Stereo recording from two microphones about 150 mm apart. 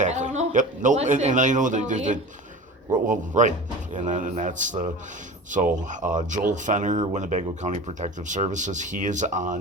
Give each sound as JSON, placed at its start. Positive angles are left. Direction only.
{"t": 0.0, "sound": "a man's voice", "side_deg": -55}